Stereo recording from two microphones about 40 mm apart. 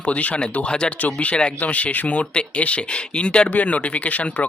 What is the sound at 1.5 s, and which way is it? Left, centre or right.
Speech, left.